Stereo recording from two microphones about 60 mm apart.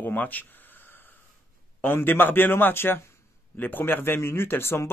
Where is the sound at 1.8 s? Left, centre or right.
Left.